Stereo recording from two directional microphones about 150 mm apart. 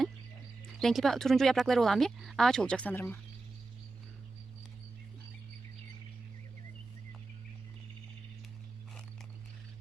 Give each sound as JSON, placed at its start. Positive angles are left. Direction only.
{"t": 0.8, "sound": "speech", "side_deg": 0}